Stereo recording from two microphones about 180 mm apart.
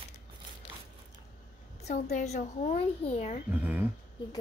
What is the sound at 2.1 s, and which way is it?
A child's voice, 40° left (ahead or behind).